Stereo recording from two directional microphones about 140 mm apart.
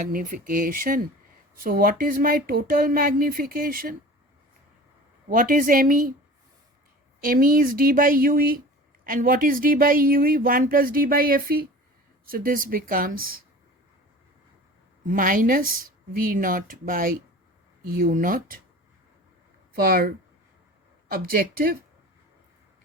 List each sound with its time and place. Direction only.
0.1 s speech: 80° right
5.3 s speech: 85° right
7.2 s speech: 90° right
15.0 s speech: 75° right (ahead or behind)
19.7 s speech: 90° right